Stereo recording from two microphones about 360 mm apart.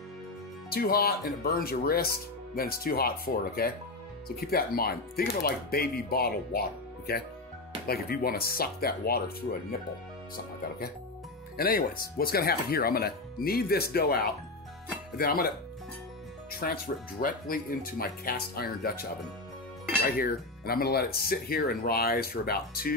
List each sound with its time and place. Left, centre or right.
0.7 s speech: left
7.8 s speech: left
11.5 s speech: left
16.5 s speech: left